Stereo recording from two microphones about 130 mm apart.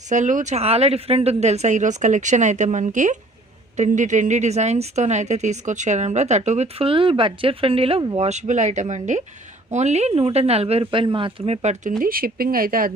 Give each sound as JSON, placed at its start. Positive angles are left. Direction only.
{"t": 0.1, "sound": "a woman's voice", "side_deg": -75}
{"t": 8.2, "sound": "a woman's voice", "side_deg": -60}
{"t": 12.0, "sound": "speech", "side_deg": -90}